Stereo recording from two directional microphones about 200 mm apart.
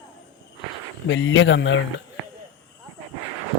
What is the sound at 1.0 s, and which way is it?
Speech, 70° left (ahead or behind).